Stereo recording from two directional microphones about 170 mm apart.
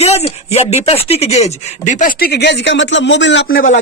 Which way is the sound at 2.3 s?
85° left.